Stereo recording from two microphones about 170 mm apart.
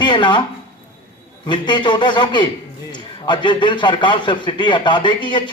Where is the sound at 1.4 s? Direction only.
25° left (ahead or behind).